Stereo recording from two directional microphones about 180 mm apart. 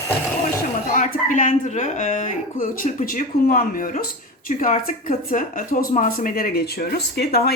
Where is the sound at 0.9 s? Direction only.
45° left (ahead or behind).